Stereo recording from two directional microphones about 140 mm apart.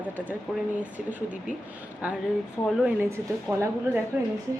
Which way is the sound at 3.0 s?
20° right (ahead or behind).